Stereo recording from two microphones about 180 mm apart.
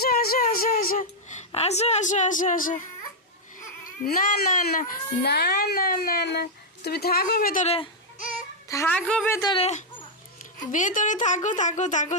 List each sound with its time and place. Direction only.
0.0 s a sound: 55° left (ahead or behind)
4.0 s a child's voice: 50° left (ahead or behind)
8.7 s a woman's voice: 15° left (ahead or behind)
9.0 s a woman's voice: 5° left (ahead or behind)
9.4 s speech: 25° left (ahead or behind)
10.7 s speech: 45° left (ahead or behind)